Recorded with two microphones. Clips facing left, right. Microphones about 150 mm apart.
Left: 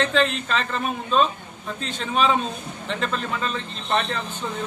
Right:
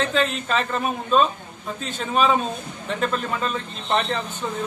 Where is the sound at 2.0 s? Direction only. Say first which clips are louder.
Right 1 dB; 5° right (ahead or behind).